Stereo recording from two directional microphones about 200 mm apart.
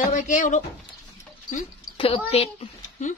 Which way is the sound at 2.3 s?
30° left (ahead or behind).